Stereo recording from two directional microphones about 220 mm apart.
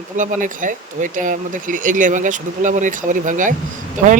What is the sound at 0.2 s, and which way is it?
Speech, 35° right (ahead or behind).